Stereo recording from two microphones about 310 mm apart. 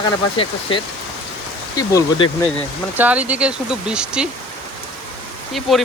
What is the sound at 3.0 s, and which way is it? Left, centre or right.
Speech, centre.